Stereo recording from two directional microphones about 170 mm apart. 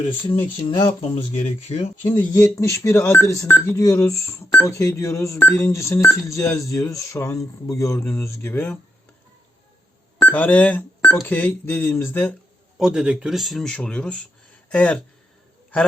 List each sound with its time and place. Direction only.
0.7 s speech: 30° left (ahead or behind)
2.0 s speech: 15° left (ahead or behind)
10.2 s speech: 10° left (ahead or behind)
12.8 s speech: 5° right (ahead or behind)